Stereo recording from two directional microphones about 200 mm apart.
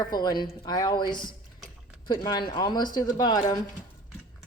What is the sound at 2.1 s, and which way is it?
A man's voice, 20° left (ahead or behind).